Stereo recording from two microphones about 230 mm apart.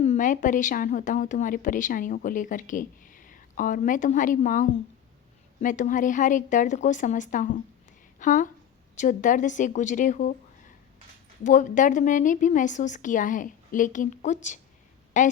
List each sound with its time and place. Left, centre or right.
0.0 s a woman's voice: left
11.4 s a woman's voice: left